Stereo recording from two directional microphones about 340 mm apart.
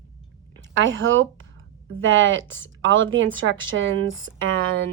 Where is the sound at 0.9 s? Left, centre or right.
Right.